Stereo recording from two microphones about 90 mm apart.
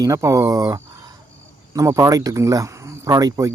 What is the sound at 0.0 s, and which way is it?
Speech, 35° right (ahead or behind).